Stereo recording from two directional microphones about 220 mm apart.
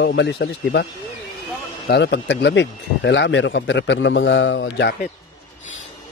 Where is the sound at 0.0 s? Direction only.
50° left (ahead or behind).